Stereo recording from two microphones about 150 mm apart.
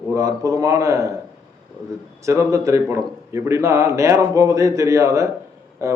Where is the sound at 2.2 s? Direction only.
20° right (ahead or behind).